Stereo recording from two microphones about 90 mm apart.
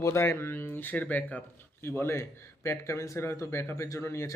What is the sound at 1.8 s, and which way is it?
A man's voice, 30° left (ahead or behind).